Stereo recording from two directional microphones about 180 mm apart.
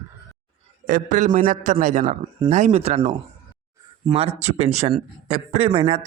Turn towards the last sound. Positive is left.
turn(degrees=-35)  # may be behind; listen again after turning